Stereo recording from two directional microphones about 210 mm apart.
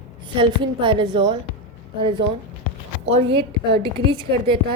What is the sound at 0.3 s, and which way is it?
A woman's voice, 25° right (ahead or behind).